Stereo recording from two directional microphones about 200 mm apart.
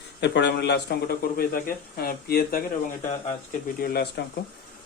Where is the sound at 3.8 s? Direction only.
50° left (ahead or behind).